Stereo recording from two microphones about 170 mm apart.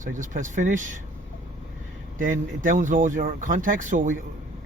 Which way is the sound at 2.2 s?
50° right (ahead or behind).